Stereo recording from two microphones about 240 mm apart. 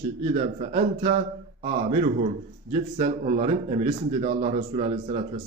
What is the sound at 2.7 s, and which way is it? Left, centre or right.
Speech, right.